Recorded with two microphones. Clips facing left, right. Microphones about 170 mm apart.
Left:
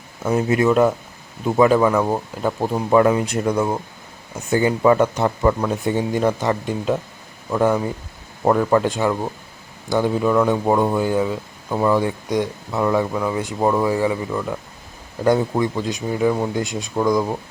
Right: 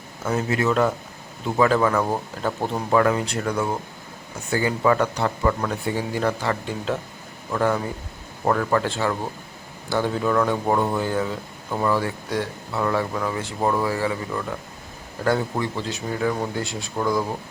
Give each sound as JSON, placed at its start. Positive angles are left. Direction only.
{"t": 0.3, "sound": "speech", "side_deg": 20}